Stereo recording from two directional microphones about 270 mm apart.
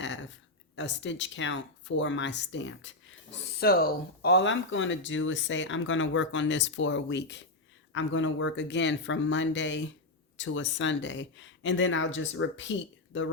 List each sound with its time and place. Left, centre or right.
0.0 s a sound: left
0.8 s speech: left
3.6 s speech: left